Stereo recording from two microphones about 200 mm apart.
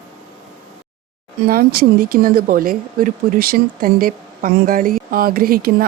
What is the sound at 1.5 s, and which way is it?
Speech, 50° right (ahead or behind).